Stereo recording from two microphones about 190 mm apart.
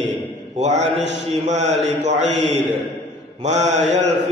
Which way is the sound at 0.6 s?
35° right (ahead or behind).